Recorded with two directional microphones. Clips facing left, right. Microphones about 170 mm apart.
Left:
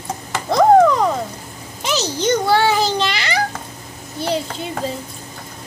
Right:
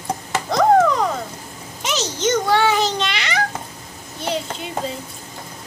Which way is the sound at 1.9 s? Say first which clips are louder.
Left 2 dB; 35° left (ahead or behind).